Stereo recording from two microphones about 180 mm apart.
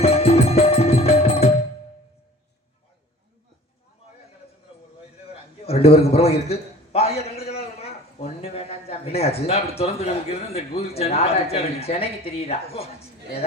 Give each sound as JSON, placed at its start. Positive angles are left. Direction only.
{"t": 0.0, "sound": "music", "side_deg": 35}
{"t": 5.3, "sound": "a sound", "side_deg": 35}
{"t": 8.5, "sound": "a man's voice", "side_deg": 35}